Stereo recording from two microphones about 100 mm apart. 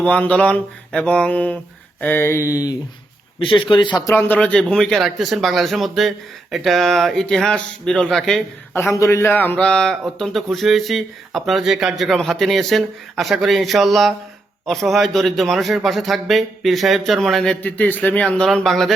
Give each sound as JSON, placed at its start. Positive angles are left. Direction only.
{"t": 0.0, "sound": "mantra", "side_deg": 15}
{"t": 2.0, "sound": "speech", "side_deg": 20}
{"t": 3.7, "sound": "speech", "side_deg": 50}
{"t": 4.0, "sound": "speech", "side_deg": 20}
{"t": 4.4, "sound": "a man's voice", "side_deg": 10}
{"t": 8.7, "sound": "a man's voice", "side_deg": 30}